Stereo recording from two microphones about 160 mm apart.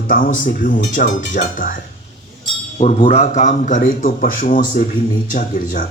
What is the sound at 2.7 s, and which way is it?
A man's voice, 40° left (ahead or behind).